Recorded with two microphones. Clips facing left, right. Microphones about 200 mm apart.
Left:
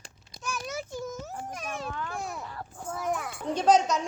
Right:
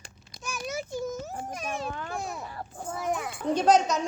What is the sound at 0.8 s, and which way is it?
Speech, 15° right (ahead or behind).